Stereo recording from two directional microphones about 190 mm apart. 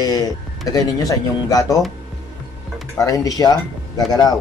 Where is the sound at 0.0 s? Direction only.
20° left (ahead or behind).